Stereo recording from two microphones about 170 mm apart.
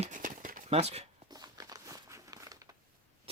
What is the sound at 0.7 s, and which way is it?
Speech, 40° right (ahead or behind).